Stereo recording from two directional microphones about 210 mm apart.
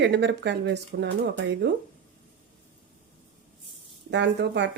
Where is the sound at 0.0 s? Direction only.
55° right (ahead or behind).